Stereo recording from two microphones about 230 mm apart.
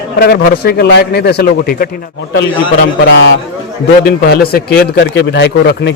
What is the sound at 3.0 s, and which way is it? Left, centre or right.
A man's voice, left.